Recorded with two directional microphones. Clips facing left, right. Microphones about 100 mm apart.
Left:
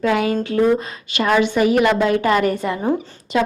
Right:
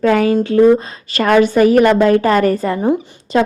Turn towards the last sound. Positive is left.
turn(degrees=-40)  # may be behind; listen again after turning